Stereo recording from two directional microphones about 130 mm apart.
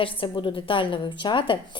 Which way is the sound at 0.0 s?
40° left (ahead or behind).